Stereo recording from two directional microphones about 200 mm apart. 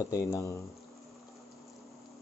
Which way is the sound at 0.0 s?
15° left (ahead or behind).